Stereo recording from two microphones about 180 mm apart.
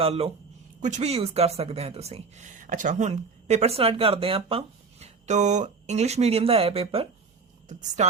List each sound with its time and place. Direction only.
0.0 s speech: 30° right (ahead or behind)